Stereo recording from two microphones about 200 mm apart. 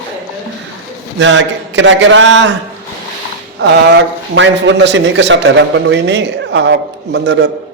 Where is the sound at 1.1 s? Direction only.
65° right (ahead or behind).